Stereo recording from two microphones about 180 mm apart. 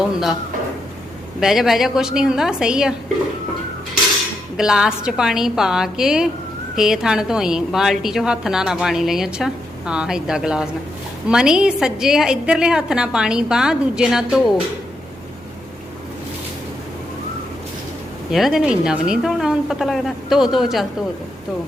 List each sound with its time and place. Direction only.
1.4 s a woman's voice: centre (ahead or behind)
4.5 s a woman's voice: 5° right (ahead or behind)
18.3 s a woman's voice: centre (ahead or behind)